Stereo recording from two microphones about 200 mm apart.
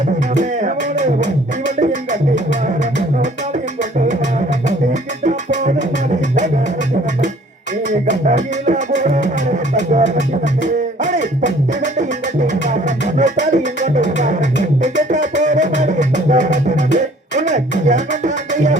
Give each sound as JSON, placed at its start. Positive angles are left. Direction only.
{"t": 0.3, "sound": "music", "side_deg": -35}
{"t": 5.2, "sound": "music", "side_deg": -35}
{"t": 7.9, "sound": "music", "side_deg": -35}
{"t": 12.6, "sound": "music", "side_deg": -35}